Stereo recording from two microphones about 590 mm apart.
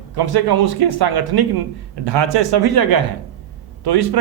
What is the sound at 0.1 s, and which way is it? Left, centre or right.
Speech, right.